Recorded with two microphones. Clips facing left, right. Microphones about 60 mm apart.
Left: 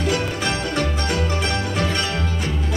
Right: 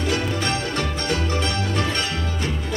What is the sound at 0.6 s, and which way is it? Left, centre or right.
Music, left.